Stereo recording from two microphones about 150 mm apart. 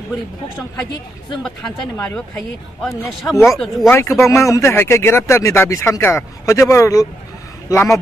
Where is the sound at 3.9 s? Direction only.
15° left (ahead or behind).